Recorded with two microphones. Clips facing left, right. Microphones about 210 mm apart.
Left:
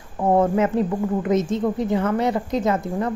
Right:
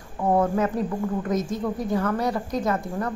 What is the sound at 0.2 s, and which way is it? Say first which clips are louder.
A woman's voice: left 3 dB; 25° left (ahead or behind).